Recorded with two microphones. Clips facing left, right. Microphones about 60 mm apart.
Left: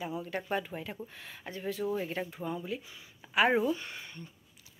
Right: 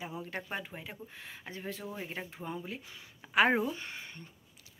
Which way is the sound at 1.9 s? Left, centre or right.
Centre.